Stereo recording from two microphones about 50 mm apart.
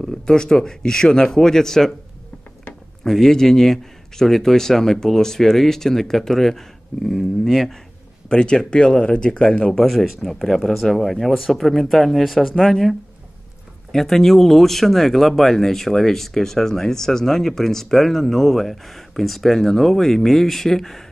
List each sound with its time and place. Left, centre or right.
0.0 s a man's voice: centre
3.0 s a man's voice: centre
8.3 s a man's voice: centre
9.7 s speech: centre
13.9 s speech: centre